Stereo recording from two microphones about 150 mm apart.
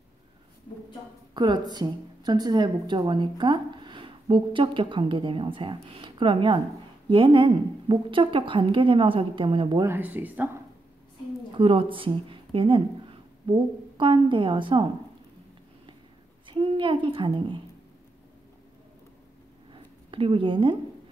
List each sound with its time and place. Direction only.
1.3 s a woman's voice: 30° right (ahead or behind)
9.8 s speech: 10° right (ahead or behind)
11.5 s a woman's voice: 35° right (ahead or behind)
16.4 s a woman's voice: 35° right (ahead or behind)
19.7 s a sound: 35° right (ahead or behind)